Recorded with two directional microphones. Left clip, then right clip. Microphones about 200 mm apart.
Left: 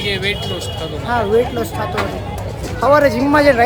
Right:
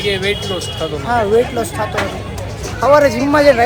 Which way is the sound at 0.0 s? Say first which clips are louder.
Right 2 dB; 25° right (ahead or behind).